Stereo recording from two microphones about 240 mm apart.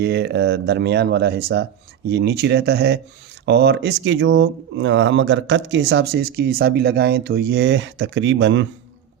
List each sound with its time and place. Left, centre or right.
0.0 s speech: right